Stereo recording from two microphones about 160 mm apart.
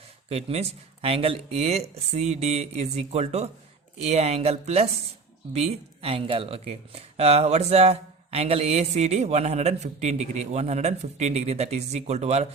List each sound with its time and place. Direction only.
0.3 s speech: 40° right (ahead or behind)